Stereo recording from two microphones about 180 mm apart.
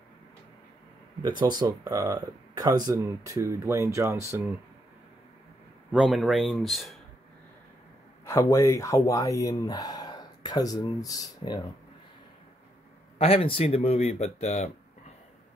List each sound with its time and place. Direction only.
1.4 s speech: 25° right (ahead or behind)
5.9 s speech: 5° right (ahead or behind)
8.3 s speech: 15° left (ahead or behind)
13.2 s speech: 30° left (ahead or behind)